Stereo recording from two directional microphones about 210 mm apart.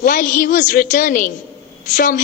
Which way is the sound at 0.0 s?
40° left (ahead or behind).